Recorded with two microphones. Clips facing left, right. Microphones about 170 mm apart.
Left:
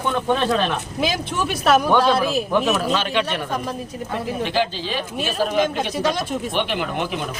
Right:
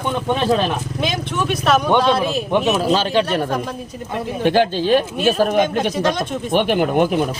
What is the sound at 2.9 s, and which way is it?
Speech, 35° right (ahead or behind).